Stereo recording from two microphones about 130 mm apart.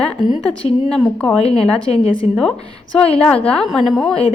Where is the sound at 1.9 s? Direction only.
50° left (ahead or behind).